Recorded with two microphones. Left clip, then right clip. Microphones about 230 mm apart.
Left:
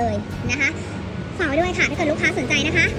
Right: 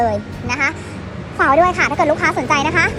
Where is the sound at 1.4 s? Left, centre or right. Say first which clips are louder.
Right 8 dB; right.